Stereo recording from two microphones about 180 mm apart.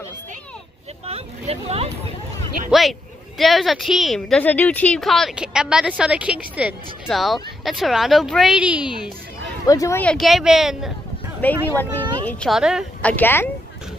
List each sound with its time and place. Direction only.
1.0 s a sound: 35° right (ahead or behind)
2.7 s a woman's voice: centre (ahead or behind)
9.7 s a woman's voice: 15° left (ahead or behind); by 10.9 s centre (ahead or behind)
11.7 s a sound: 10° left (ahead or behind)
12.4 s a woman's voice: 5° right (ahead or behind)
13.0 s speech: 10° left (ahead or behind)